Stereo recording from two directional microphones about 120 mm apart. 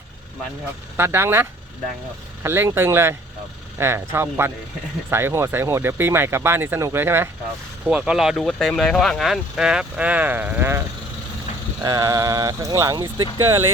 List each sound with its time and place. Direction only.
0.9 s speech: 20° right (ahead or behind)
11.8 s speech: 30° right (ahead or behind)